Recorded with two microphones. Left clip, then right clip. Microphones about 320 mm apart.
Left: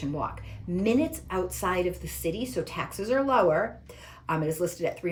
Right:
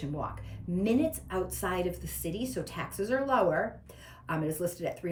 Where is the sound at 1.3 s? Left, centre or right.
Centre.